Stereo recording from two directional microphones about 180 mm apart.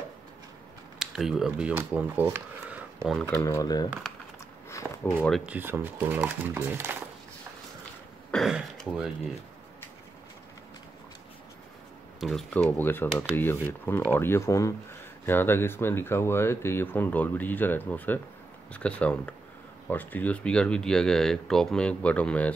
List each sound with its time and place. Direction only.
0.9 s speech: centre (ahead or behind)
3.3 s speech: 15° left (ahead or behind)
4.6 s walk: 15° left (ahead or behind)
5.4 s speech: 10° right (ahead or behind)
8.3 s throat clearing: centre (ahead or behind)
12.2 s speech: centre (ahead or behind)